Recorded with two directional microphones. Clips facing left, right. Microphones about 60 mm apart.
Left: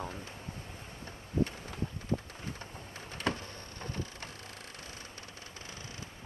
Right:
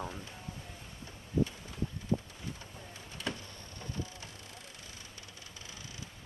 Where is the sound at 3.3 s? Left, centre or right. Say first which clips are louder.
Left 5 dB; left.